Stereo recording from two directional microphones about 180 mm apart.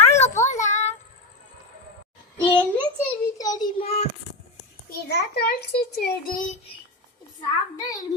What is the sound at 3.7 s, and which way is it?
Child singing, 35° left (ahead or behind).